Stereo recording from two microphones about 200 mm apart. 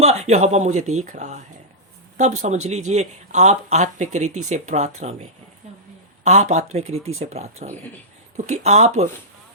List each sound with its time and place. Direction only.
0.0 s speech: 30° right (ahead or behind)
2.6 s speech: 35° right (ahead or behind)
6.2 s speech: 35° right (ahead or behind)